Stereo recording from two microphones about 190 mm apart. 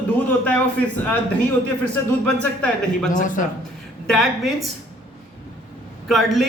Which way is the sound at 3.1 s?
45° left (ahead or behind).